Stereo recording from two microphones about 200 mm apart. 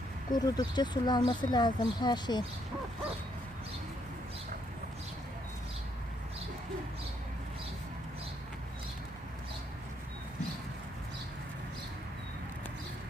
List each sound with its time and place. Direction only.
0.3 s speech: 20° left (ahead or behind)